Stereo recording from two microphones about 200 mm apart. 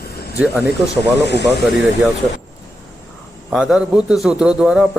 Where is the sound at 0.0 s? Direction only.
55° left (ahead or behind).